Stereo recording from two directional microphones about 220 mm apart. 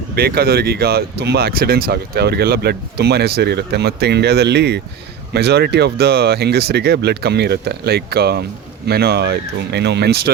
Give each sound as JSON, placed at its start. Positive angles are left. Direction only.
{"t": 0.2, "sound": "speech", "side_deg": -45}